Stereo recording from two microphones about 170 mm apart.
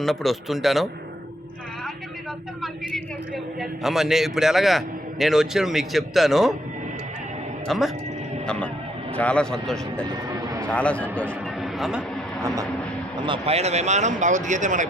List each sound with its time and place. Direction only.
0.0 s speech: centre (ahead or behind)
2.6 s a sound: centre (ahead or behind)
5.2 s speech: centre (ahead or behind)
7.7 s a man's voice: centre (ahead or behind)
10.2 s a sound: 20° right (ahead or behind)
10.7 s a man's voice: 5° left (ahead or behind)
12.4 s vehicle: 20° right (ahead or behind)
13.2 s speech: 30° right (ahead or behind)